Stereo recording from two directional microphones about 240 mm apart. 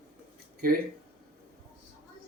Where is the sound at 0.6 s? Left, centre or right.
Right.